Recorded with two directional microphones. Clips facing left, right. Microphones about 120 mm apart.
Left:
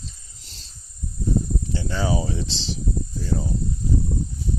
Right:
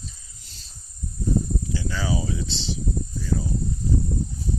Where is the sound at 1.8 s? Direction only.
30° left (ahead or behind).